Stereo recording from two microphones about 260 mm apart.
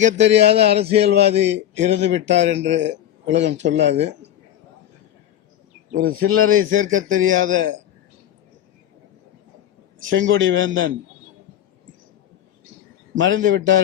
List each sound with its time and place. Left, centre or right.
0.0 s a sound: right
1.5 s speech: right
1.9 s a man's voice: right
5.9 s a man's voice: right
10.0 s a man's voice: right
13.1 s a man's voice: right